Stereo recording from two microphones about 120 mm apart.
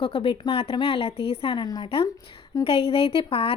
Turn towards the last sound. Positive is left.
turn(degrees=50)  # may be behind; listen again after turning